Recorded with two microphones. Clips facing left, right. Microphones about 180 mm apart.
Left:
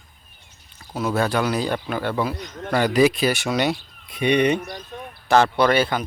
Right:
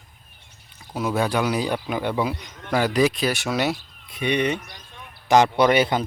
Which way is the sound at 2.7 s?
Centre (ahead or behind).